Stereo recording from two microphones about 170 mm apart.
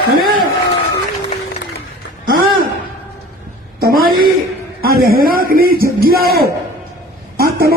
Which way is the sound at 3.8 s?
60° right (ahead or behind).